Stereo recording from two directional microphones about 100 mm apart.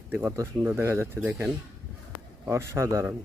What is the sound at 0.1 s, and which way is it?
Speech, 25° right (ahead or behind).